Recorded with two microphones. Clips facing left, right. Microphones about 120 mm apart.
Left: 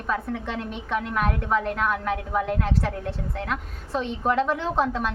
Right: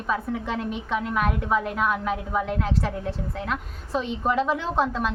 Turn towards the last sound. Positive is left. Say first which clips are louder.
# even
turn(degrees=0)  # may be behind; listen again after turning